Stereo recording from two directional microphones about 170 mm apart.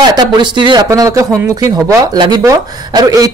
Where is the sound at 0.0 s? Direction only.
25° right (ahead or behind).